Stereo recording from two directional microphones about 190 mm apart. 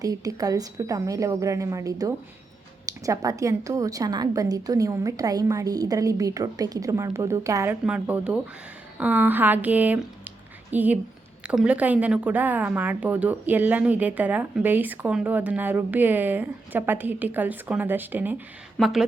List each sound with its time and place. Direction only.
0.0 s a woman's voice: 20° right (ahead or behind); by 19.0 s centre (ahead or behind)